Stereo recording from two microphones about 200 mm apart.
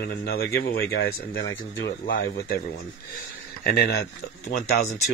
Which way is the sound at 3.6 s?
50° left (ahead or behind).